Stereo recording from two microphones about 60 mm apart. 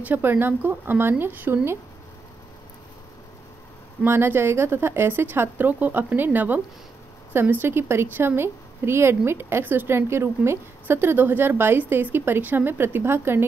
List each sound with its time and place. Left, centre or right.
0.0 s a woman's voice: right
4.0 s a woman's voice: right